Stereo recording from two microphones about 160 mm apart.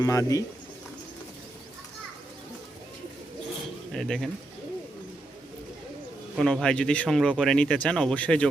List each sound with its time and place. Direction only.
0.0 s speech: 20° left (ahead or behind)
3.9 s a man's voice: 5° left (ahead or behind)
6.3 s a man's voice: 5° left (ahead or behind)